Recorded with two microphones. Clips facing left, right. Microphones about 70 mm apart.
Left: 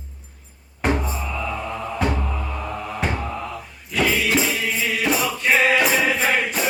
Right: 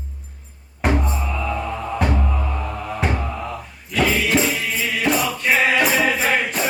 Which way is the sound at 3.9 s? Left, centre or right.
Centre.